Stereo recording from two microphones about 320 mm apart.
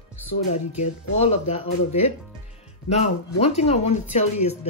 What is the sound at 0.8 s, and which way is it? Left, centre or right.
A woman's voice, centre.